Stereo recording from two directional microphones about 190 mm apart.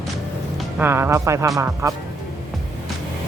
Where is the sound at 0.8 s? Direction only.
10° right (ahead or behind).